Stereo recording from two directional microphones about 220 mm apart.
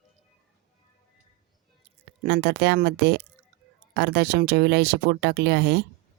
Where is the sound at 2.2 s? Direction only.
50° right (ahead or behind).